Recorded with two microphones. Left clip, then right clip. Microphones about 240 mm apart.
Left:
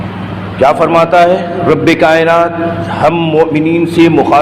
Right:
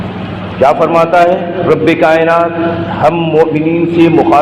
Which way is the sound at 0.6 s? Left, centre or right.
Left.